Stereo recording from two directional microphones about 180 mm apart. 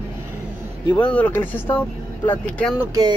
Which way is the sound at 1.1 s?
10° left (ahead or behind).